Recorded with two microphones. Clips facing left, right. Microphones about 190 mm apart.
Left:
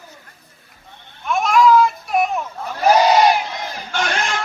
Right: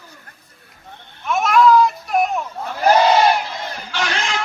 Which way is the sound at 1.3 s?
Centre (ahead or behind).